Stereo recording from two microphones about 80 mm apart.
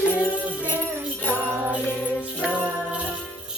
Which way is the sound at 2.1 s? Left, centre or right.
Centre.